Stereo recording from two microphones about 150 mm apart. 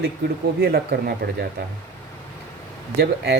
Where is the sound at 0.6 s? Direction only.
90° right.